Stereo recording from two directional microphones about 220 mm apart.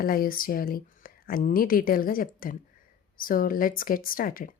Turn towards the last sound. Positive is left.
turn(degrees=40)  # may be behind; listen again after turning